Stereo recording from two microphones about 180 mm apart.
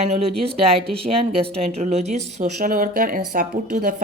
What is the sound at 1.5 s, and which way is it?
Speech, 35° right (ahead or behind).